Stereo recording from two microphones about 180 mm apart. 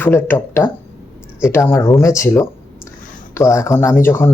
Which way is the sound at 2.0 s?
15° left (ahead or behind).